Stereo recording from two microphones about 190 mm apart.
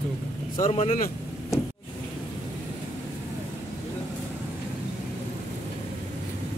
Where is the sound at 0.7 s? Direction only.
35° left (ahead or behind).